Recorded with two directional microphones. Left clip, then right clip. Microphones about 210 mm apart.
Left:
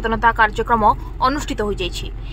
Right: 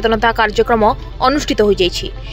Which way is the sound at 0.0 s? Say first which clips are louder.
Right 2 dB; 25° right (ahead or behind).